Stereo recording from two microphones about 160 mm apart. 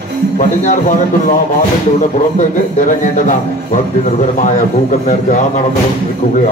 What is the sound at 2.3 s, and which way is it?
A man's voice, 50° left (ahead or behind).